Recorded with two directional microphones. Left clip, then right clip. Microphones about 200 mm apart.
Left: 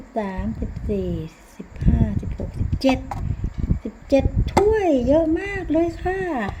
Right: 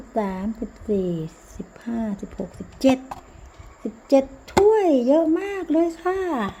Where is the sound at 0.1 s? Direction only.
15° right (ahead or behind).